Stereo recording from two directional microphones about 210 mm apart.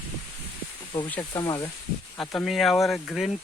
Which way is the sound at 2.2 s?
Centre (ahead or behind).